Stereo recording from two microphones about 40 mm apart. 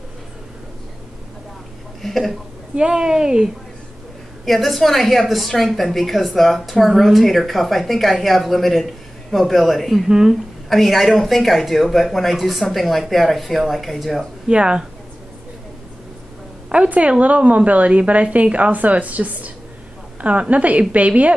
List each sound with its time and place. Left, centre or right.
2.0 s speech: centre
2.7 s speech: right
4.5 s a woman's voice: centre
10.0 s a woman's voice: centre
10.3 s a woman's voice: centre
14.5 s speech: right
16.6 s a sound: right
17.2 s a woman's voice: right